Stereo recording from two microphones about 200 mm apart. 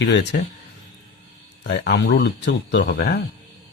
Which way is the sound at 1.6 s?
60° left (ahead or behind).